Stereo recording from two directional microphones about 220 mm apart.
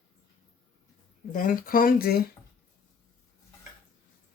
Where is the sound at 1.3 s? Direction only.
40° left (ahead or behind).